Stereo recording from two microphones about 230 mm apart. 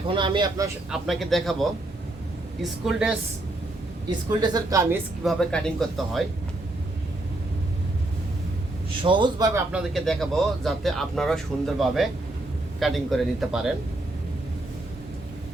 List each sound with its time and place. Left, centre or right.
0.1 s speech: right
0.9 s speech: centre
2.6 s speech: centre
4.3 s speech: centre
5.2 s speech: centre
9.0 s speech: centre
9.7 s speech: centre